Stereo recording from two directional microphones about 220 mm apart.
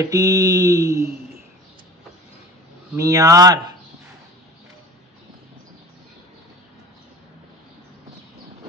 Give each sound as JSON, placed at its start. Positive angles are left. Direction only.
{"t": 0.0, "sound": "mantra", "side_deg": -15}
{"t": 2.9, "sound": "mantra", "side_deg": -15}